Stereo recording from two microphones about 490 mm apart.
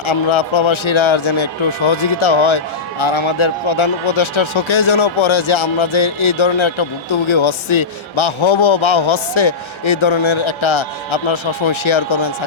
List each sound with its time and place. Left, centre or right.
0.0 s a man's voice: left